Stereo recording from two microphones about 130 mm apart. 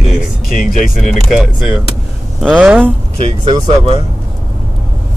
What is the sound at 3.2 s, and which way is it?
Speech, 55° right (ahead or behind).